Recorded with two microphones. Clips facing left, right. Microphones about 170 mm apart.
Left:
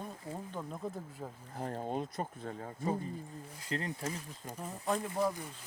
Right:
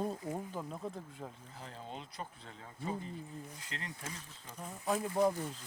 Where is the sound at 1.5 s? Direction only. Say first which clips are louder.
Left 10 dB; 50° left (ahead or behind).